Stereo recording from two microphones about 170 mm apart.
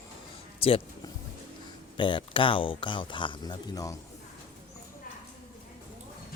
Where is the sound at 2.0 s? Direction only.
30° left (ahead or behind).